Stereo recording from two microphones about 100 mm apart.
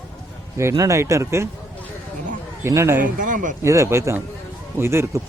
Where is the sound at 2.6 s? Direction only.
25° right (ahead or behind).